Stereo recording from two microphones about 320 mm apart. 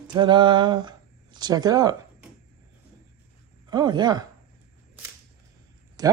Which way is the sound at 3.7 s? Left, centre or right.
Centre.